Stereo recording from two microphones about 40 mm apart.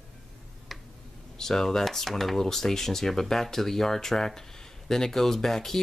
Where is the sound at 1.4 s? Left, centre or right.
Centre.